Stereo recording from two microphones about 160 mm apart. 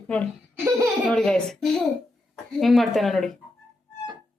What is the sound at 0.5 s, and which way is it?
Laughter, 15° right (ahead or behind).